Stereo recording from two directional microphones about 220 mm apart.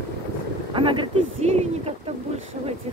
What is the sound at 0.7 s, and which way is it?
Speech, 20° right (ahead or behind).